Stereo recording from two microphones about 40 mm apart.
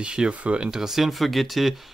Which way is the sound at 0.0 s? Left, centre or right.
Centre.